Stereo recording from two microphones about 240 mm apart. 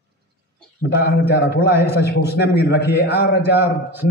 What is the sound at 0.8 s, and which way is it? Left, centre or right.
A man's voice, left.